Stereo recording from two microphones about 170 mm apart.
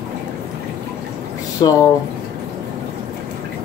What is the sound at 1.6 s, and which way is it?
Speech, 25° left (ahead or behind).